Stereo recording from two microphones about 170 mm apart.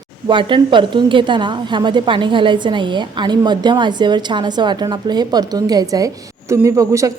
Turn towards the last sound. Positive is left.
turn(degrees=-20)  # may be behind; listen again after turning